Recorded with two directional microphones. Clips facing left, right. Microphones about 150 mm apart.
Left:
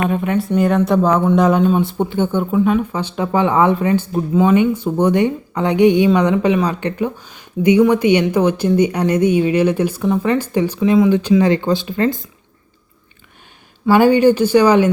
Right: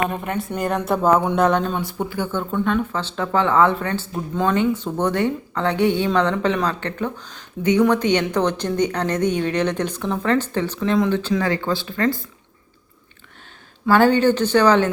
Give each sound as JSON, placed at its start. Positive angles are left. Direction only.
{"t": 0.1, "sound": "speech", "side_deg": 0}
{"t": 1.8, "sound": "speech", "side_deg": 25}
{"t": 2.5, "sound": "speech", "side_deg": 5}
{"t": 13.8, "sound": "speech", "side_deg": 10}